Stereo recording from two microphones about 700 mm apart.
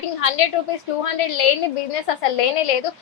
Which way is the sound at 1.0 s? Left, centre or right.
Left.